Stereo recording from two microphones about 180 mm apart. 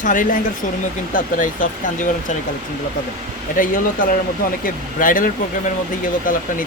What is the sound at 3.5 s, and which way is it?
Speech, 50° left (ahead or behind).